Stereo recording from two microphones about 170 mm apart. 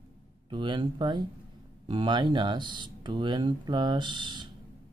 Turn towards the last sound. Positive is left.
turn(degrees=-25)  # may be behind; listen again after turning